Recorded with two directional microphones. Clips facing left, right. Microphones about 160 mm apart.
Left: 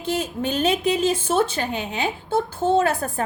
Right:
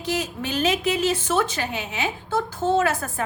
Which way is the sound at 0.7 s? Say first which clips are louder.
Left 1 dB; 35° left (ahead or behind).